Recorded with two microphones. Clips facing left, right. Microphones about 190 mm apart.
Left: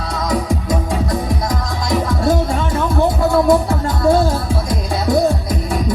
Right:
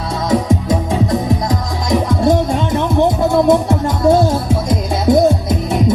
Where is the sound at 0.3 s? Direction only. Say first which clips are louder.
Right 5 dB; 25° right (ahead or behind).